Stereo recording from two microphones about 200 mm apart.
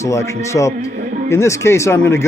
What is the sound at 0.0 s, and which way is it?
A man's voice, 15° left (ahead or behind).